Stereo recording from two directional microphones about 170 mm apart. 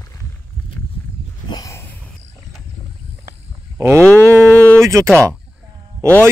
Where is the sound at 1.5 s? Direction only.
15° left (ahead or behind).